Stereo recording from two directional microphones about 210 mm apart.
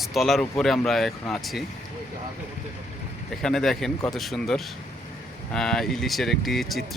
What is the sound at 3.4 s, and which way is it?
Speech, centre (ahead or behind).